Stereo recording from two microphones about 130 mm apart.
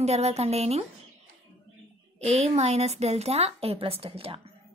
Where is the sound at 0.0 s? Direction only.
55° right (ahead or behind).